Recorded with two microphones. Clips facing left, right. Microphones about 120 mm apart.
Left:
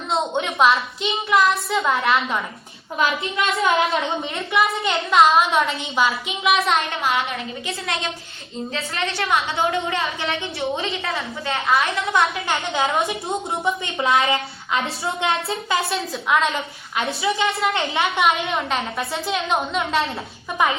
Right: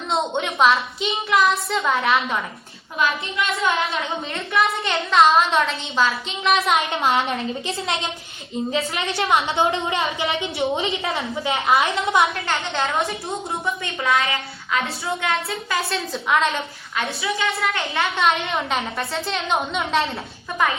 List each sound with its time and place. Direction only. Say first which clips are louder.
0.1 s a woman's voice: even; centre (ahead or behind)
3.6 s a woman's voice: left 5 dB; 25° left (ahead or behind)
4.5 s a woman's voice: left 1 dB; 5° left (ahead or behind)
7.0 s a woman's voice: right 2 dB; 30° right (ahead or behind)
12.2 s a woman's voice: even; centre (ahead or behind)
13.0 s a woman's voice: left 2 dB; 25° left (ahead or behind)
15.8 s a woman's voice: left 1 dB; centre (ahead or behind)
17.0 s a woman's voice: left 3 dB; 25° left (ahead or behind)
18.2 s a woman's voice: even; 5° left (ahead or behind)